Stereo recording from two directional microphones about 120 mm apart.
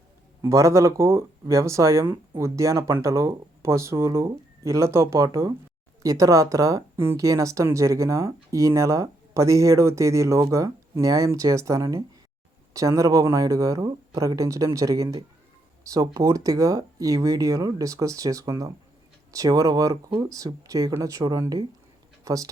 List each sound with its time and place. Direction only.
0.4 s a woman's voice: 25° right (ahead or behind)